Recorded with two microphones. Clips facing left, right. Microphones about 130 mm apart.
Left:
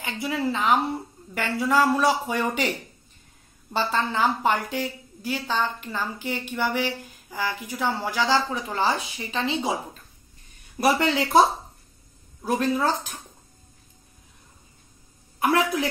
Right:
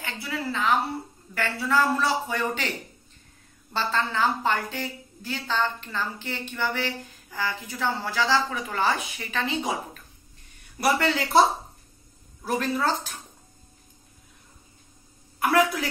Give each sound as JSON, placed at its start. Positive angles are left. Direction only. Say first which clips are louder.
{"t": 0.0, "sound": "a woman's voice", "louder": "left 5 dB", "side_deg": 20}
{"t": 3.7, "sound": "a woman's voice", "louder": "left 2 dB", "side_deg": 15}
{"t": 10.8, "sound": "a woman's voice", "louder": "left 2 dB", "side_deg": 20}
{"t": 12.4, "sound": "a woman's voice", "louder": "left 2 dB", "side_deg": 15}
{"t": 15.3, "sound": "a woman's voice", "louder": "even", "side_deg": 25}